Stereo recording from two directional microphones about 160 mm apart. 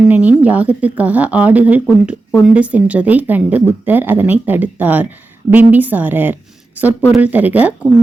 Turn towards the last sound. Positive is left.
turn(degrees=-10)  # may be behind; listen again after turning